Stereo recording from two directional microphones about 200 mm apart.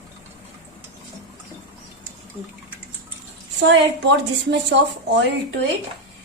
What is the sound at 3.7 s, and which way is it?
A woman's voice, 60° right (ahead or behind).